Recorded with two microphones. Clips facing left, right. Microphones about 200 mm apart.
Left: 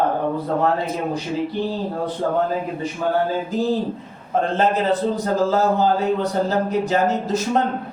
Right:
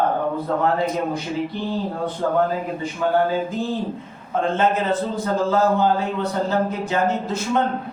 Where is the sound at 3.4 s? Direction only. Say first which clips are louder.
Left 4 dB; 40° left (ahead or behind).